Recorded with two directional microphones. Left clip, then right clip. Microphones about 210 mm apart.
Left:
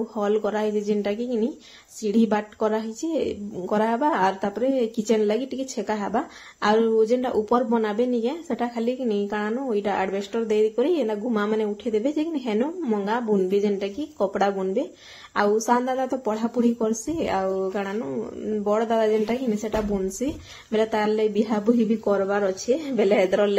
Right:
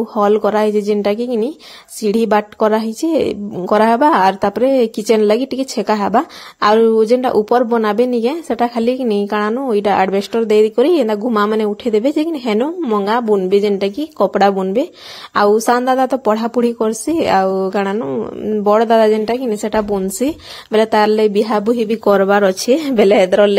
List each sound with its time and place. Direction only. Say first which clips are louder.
0.1 s a woman's voice: right 12 dB; 40° right (ahead or behind)